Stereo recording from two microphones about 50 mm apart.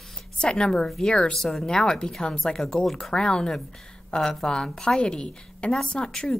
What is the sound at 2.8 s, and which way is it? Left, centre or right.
Speech, centre.